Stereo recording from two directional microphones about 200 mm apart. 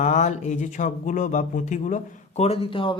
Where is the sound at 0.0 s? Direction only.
35° left (ahead or behind).